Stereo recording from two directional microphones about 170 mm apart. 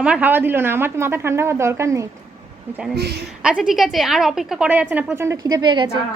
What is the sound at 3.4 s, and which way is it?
A woman's voice, 5° right (ahead or behind).